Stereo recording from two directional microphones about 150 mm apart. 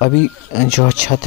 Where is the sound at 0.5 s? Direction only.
55° left (ahead or behind).